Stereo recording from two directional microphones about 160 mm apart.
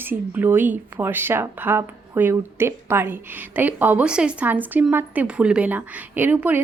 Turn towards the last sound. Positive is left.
turn(degrees=-10)  # may be behind; listen again after turning